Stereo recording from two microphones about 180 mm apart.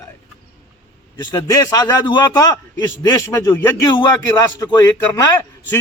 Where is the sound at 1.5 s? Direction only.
20° left (ahead or behind).